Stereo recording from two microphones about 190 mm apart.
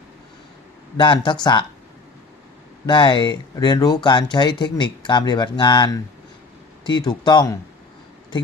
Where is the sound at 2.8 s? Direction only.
25° left (ahead or behind).